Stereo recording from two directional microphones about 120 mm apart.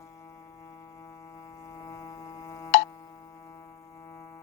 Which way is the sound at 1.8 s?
25° left (ahead or behind).